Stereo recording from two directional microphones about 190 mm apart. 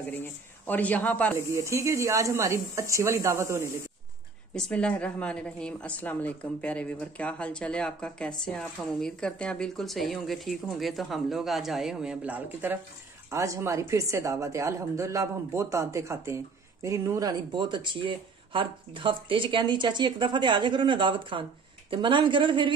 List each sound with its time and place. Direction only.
0.0 s speech: 10° left (ahead or behind)
1.5 s a woman's voice: 15° right (ahead or behind)
4.6 s a woman's voice: 5° left (ahead or behind); by 22.7 s 25° right (ahead or behind)